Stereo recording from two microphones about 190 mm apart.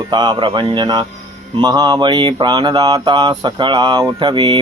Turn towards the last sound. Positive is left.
turn(degrees=-25)  # may be behind; listen again after turning